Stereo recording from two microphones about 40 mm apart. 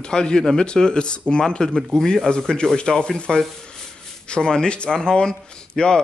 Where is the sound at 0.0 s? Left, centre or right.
Left.